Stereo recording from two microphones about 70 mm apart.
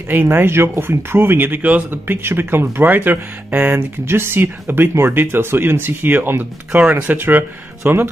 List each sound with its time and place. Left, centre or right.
0.1 s speech: right